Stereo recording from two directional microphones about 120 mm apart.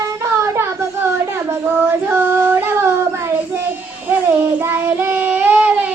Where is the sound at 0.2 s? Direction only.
25° right (ahead or behind).